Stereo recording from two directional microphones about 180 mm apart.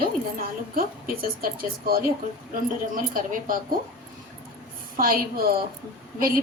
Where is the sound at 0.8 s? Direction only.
55° right (ahead or behind).